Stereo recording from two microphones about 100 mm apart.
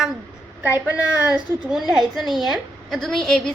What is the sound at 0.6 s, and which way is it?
A woman's voice, 10° right (ahead or behind).